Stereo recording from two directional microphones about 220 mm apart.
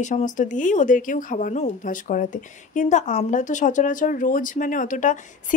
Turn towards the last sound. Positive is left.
turn(degrees=35)  # may be behind; listen again after turning